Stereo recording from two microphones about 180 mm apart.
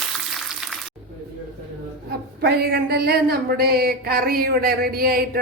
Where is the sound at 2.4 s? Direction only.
60° right (ahead or behind).